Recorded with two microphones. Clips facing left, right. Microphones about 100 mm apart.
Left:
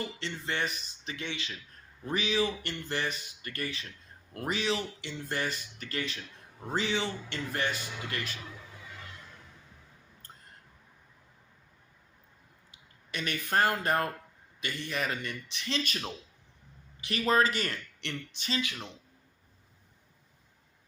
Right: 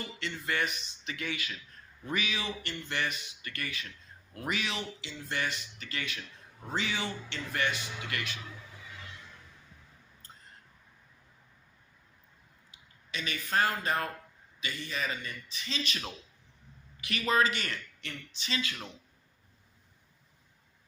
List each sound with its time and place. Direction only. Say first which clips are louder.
0.2 s speech: right 4 dB; 30° left (ahead or behind)
4.9 s speech: left 1 dB; 50° left (ahead or behind)
10.2 s a sound: left 1 dB; 55° left (ahead or behind)
12.7 s speech: left 1 dB; 55° left (ahead or behind)
17.0 s speech: left 2 dB; 35° left (ahead or behind)
18.0 s a sound: left 5 dB; 60° left (ahead or behind)